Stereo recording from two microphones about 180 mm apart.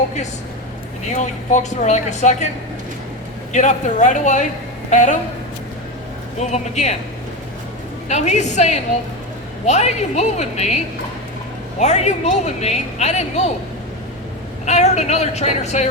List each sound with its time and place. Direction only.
1.1 s speech: 40° left (ahead or behind)
3.5 s speech: 45° left (ahead or behind)
6.4 s speech: 40° left (ahead or behind)
8.0 s speech: 40° left (ahead or behind)
11.8 s speech: 40° left (ahead or behind)
14.6 s speech: 40° left (ahead or behind)